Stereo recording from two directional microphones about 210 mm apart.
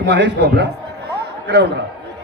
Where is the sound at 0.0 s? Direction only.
55° right (ahead or behind).